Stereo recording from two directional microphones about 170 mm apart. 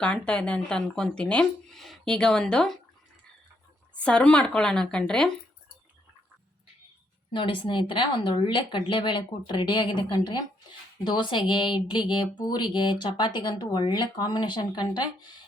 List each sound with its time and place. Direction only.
0.0 s speech: 5° left (ahead or behind)
4.0 s speech: 5° left (ahead or behind)
7.3 s a woman's voice: 30° left (ahead or behind)